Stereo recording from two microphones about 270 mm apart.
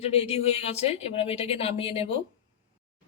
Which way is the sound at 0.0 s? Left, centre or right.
Left.